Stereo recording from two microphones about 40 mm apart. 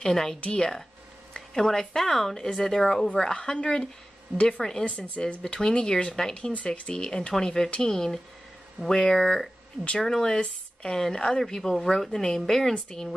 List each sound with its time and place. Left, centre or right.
0.0 s a woman's voice: centre
1.3 s a woman's voice: centre